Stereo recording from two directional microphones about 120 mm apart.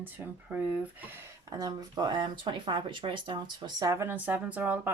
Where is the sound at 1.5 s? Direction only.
30° right (ahead or behind); by 4.9 s 15° right (ahead or behind).